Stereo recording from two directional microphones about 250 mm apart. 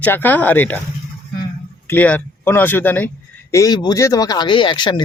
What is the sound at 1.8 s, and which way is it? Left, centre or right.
Speech, centre.